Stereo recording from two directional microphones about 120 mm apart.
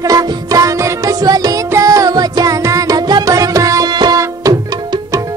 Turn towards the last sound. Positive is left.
turn(degrees=-30)  # may be behind; listen again after turning